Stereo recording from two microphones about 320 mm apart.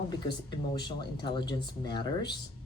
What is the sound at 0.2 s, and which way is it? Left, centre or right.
Speech, centre.